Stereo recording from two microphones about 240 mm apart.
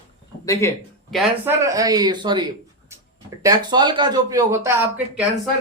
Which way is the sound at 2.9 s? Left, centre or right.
Centre.